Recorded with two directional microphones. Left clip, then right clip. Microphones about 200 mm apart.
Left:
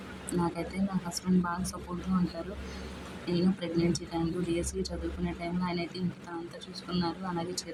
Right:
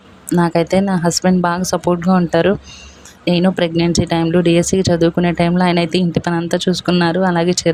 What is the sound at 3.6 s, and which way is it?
Speech, 45° right (ahead or behind).